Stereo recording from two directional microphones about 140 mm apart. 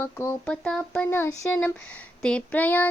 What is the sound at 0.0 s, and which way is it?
Speech, 20° left (ahead or behind).